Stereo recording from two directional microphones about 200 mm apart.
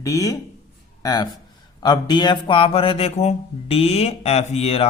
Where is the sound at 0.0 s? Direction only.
15° left (ahead or behind).